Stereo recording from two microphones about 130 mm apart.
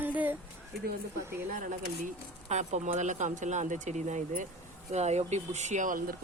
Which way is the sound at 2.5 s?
65° right (ahead or behind).